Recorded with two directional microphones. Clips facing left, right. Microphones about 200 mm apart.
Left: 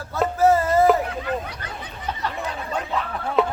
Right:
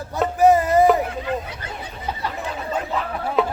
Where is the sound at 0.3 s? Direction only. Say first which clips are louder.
Right 3 dB; 15° right (ahead or behind).